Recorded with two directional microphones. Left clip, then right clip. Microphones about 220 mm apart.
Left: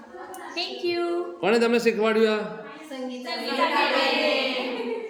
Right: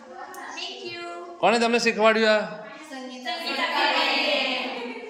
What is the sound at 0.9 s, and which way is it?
Speech, 30° left (ahead or behind).